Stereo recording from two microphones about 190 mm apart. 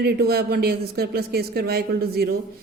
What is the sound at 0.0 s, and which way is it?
A woman's voice, 55° right (ahead or behind).